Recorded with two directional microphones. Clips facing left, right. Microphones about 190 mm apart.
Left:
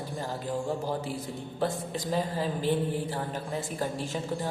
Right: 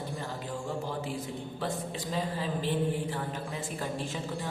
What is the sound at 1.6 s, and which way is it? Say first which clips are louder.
Speech: left 5 dB; 45° left (ahead or behind).